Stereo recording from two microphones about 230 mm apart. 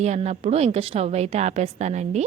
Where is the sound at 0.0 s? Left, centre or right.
Right.